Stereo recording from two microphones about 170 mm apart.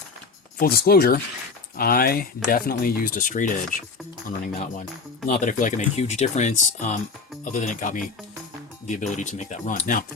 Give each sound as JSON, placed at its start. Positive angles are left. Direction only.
{"t": 0.6, "sound": "speech", "side_deg": 65}